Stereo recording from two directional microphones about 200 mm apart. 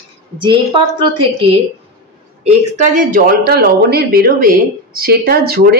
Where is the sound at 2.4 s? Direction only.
40° right (ahead or behind).